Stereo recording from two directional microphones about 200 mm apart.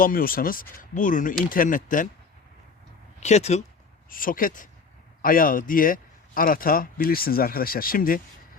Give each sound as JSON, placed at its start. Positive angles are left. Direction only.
{"t": 0.0, "sound": "a man's voice", "side_deg": 45}
{"t": 3.2, "sound": "speech", "side_deg": 35}
{"t": 4.1, "sound": "a man's voice", "side_deg": 45}